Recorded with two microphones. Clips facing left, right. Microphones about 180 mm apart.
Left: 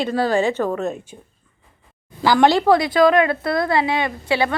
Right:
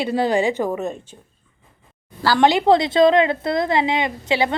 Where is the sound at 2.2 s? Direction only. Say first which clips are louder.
Left 1 dB; 15° left (ahead or behind).